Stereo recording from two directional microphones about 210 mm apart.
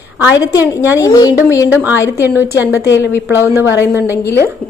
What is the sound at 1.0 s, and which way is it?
Speech, 15° left (ahead or behind).